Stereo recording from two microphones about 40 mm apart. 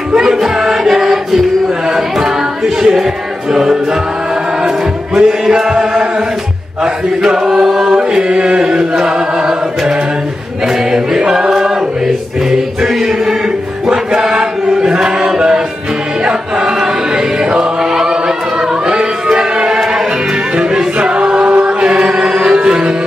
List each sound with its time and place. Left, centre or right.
0.1 s music: centre
1.9 s a capella: centre
3.5 s music: centre
6.8 s chant: centre
10.7 s choir: centre
13.8 s chant: centre
16.3 s music: centre
17.1 s choir: right
19.3 s chant: right
20.5 s music: right
21.6 s chant: right
22.5 s music: centre